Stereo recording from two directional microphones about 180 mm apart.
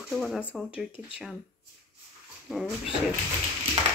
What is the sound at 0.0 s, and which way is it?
Speech, centre (ahead or behind).